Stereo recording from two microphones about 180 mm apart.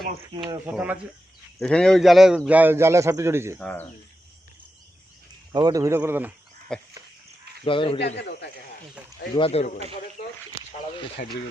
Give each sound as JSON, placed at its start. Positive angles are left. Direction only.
{"t": 0.7, "sound": "a man's voice", "side_deg": -5}
{"t": 1.5, "sound": "a man's voice", "side_deg": 5}
{"t": 3.6, "sound": "speech", "side_deg": 10}
{"t": 5.5, "sound": "a man's voice", "side_deg": -20}
{"t": 6.7, "sound": "frog", "side_deg": 5}
{"t": 7.6, "sound": "a man's voice", "side_deg": 30}
{"t": 8.0, "sound": "speech", "side_deg": 65}
{"t": 9.3, "sound": "speech", "side_deg": 30}
{"t": 11.2, "sound": "speech", "side_deg": 50}